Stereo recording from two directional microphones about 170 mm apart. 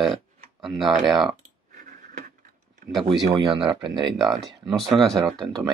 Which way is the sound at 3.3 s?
30° right (ahead or behind).